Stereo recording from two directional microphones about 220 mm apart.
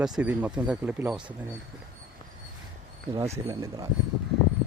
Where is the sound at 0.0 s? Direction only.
5° right (ahead or behind).